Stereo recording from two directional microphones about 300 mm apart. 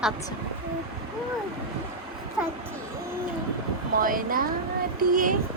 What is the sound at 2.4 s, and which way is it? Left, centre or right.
Speech, centre.